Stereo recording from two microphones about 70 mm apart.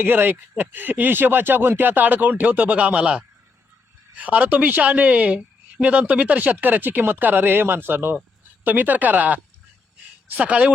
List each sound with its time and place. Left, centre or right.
0.0 s speech: right